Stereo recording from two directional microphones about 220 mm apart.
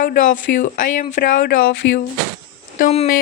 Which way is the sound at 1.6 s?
55° left (ahead or behind).